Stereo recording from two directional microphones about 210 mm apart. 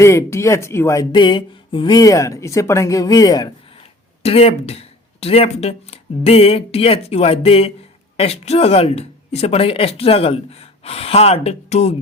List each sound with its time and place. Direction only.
0.0 s speech: 15° left (ahead or behind); by 11.9 s 30° left (ahead or behind)